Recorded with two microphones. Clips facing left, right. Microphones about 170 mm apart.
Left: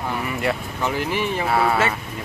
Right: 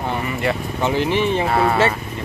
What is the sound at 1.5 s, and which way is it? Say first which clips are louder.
Speech: left 2 dB; centre (ahead or behind).